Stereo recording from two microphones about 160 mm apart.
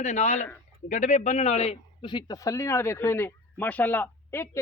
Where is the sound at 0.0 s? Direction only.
45° left (ahead or behind).